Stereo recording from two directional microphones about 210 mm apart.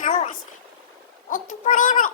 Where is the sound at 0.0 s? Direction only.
35° left (ahead or behind).